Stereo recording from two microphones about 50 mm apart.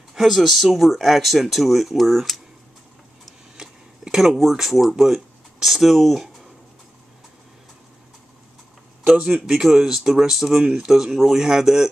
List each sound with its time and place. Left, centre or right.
0.1 s speech: centre
3.5 s speech: centre
9.0 s speech: right
9.5 s speech: centre